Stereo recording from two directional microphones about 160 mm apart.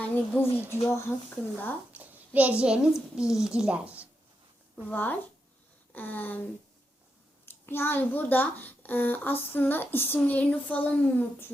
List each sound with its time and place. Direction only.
0.0 s a child's voice: 15° left (ahead or behind)
1.9 s a child's voice: 10° right (ahead or behind)
4.9 s a child's voice: 10° left (ahead or behind)
7.4 s a child's voice: 15° left (ahead or behind)